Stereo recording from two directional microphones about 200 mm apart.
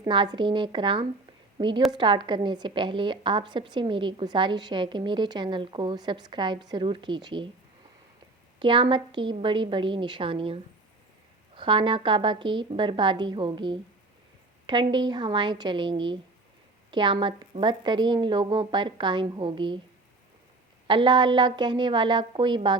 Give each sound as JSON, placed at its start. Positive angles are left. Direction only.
{"t": 0.0, "sound": "a woman's voice", "side_deg": -20}
{"t": 8.5, "sound": "a woman's voice", "side_deg": -25}
{"t": 20.8, "sound": "a woman's voice", "side_deg": -25}